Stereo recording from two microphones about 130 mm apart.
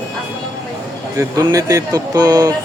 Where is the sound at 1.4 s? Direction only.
25° right (ahead or behind).